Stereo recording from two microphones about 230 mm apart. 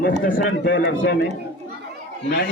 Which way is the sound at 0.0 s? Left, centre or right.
Left.